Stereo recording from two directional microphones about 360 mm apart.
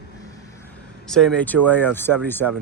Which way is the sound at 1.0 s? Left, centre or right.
Centre.